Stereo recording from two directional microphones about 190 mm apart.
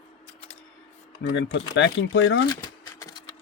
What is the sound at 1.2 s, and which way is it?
Speech, 75° left (ahead or behind).